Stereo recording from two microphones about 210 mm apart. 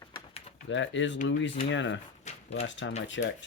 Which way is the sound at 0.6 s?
60° left (ahead or behind).